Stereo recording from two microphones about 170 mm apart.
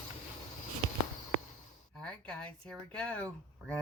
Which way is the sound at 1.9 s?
5° left (ahead or behind).